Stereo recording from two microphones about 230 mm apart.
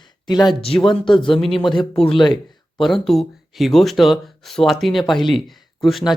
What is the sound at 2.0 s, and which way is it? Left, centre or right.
Speech, left.